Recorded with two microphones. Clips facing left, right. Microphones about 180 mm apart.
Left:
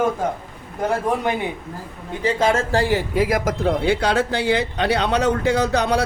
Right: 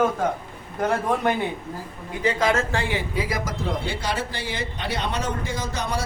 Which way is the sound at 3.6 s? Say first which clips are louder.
Left 9 dB; 70° left (ahead or behind).